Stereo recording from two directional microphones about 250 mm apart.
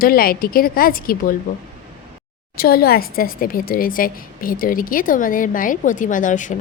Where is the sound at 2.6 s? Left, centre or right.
Left.